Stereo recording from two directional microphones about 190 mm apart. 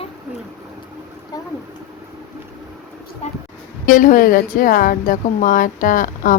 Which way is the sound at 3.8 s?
45° left (ahead or behind).